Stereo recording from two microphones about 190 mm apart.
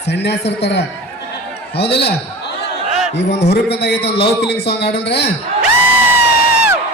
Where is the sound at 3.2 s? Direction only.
35° left (ahead or behind).